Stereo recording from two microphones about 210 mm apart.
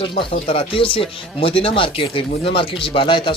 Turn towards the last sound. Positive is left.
turn(degrees=25)  # may be behind; listen again after turning